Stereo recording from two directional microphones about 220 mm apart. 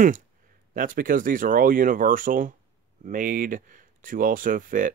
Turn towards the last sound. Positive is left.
turn(degrees=-40)  # may be behind; listen again after turning